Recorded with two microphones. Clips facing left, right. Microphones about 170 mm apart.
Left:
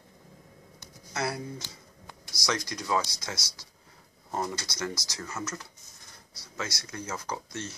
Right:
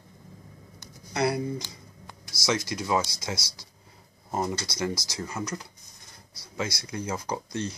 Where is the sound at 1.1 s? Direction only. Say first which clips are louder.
Right 6 dB; 15° right (ahead or behind).